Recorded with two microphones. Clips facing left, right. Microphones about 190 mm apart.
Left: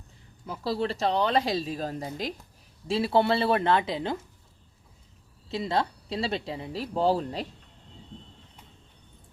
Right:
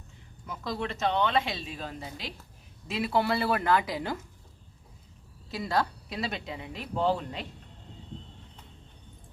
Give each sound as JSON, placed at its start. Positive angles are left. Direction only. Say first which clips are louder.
{"t": 0.4, "sound": "speech", "louder": "left 5 dB", "side_deg": 30}
{"t": 2.8, "sound": "a woman's voice", "louder": "left 4 dB", "side_deg": 30}
{"t": 5.5, "sound": "speech", "louder": "left 2 dB", "side_deg": 25}